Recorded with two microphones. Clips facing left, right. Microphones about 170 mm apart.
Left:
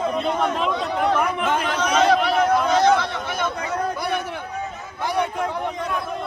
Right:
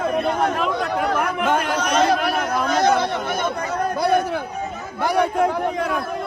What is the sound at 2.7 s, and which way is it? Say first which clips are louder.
Chatter: even; 45° right (ahead or behind).